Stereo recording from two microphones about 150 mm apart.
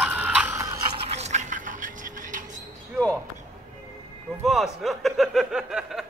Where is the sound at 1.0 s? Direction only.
45° right (ahead or behind).